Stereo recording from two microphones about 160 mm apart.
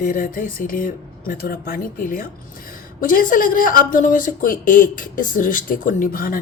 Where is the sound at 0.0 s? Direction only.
60° left (ahead or behind).